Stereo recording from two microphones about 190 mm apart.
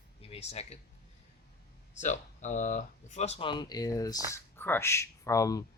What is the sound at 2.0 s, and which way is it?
Speech, 40° left (ahead or behind).